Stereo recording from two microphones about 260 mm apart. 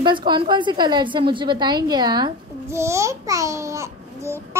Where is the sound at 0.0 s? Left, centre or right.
Centre.